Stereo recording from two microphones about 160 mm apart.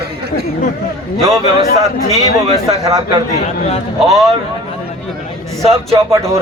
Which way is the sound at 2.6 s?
20° right (ahead or behind).